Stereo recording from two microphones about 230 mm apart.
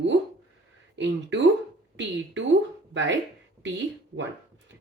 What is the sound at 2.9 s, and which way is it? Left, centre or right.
Speech, right.